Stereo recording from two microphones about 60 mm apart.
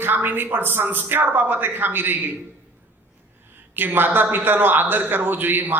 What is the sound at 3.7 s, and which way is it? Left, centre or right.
A man's voice, right.